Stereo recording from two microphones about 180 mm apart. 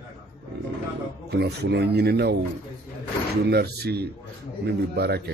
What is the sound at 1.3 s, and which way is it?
A man's voice, 70° right (ahead or behind).